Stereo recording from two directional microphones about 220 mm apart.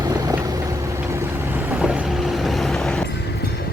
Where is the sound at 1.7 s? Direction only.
5° right (ahead or behind).